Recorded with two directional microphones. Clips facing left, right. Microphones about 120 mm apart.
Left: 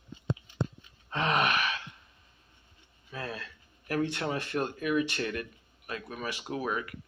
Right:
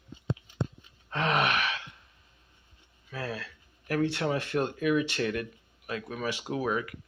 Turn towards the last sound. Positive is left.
turn(degrees=-5)  # may be behind; listen again after turning